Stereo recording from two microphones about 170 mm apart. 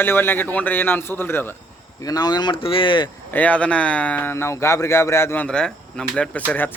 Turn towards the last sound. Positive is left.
turn(degrees=10)  # may be behind; listen again after turning